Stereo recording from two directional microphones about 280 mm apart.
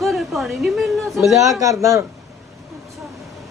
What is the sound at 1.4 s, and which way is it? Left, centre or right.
Speech, centre.